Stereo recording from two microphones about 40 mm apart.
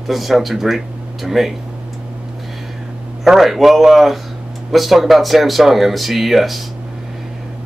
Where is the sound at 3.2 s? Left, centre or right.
Centre.